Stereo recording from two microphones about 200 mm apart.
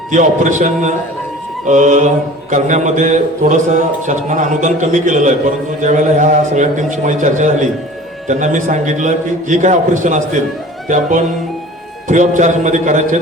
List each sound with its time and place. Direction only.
0.1 s mantra: 40° right (ahead or behind)